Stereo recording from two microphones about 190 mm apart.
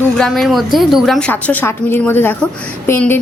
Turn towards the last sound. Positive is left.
turn(degrees=10)  # may be behind; listen again after turning